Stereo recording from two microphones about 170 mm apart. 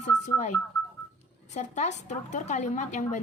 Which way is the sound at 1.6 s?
45° left (ahead or behind).